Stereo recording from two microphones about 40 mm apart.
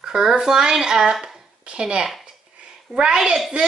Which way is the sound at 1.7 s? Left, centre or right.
Centre.